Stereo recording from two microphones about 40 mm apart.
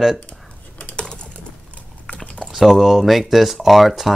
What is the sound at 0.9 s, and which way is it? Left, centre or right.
Typing, left.